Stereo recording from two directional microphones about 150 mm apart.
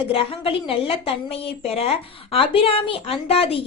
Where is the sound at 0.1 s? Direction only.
40° left (ahead or behind).